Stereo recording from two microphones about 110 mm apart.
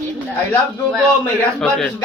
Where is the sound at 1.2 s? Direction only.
10° left (ahead or behind).